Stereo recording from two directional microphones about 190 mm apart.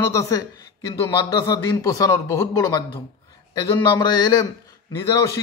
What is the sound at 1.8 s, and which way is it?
A man's voice, 20° left (ahead or behind).